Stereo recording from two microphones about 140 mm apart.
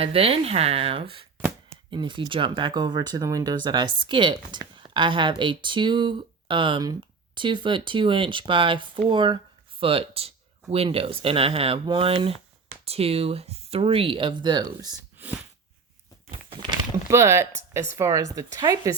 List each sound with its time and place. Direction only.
0.0 s speech: 45° right (ahead or behind)
15.2 s a sound: 10° right (ahead or behind)
17.1 s speech: 20° right (ahead or behind)